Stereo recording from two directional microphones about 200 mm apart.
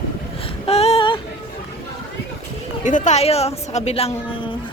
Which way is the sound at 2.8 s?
35° left (ahead or behind).